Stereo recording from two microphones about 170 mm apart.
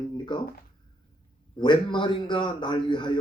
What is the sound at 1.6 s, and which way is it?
A man's voice, 30° left (ahead or behind).